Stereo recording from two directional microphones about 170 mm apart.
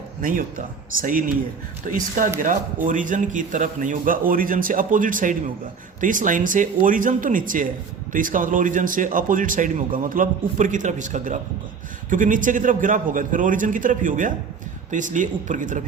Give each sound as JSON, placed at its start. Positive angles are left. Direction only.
{"t": 0.2, "sound": "a man's voice", "side_deg": -55}
{"t": 1.9, "sound": "speech", "side_deg": -50}